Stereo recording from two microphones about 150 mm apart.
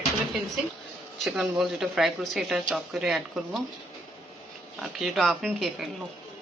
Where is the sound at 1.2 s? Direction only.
Centre (ahead or behind).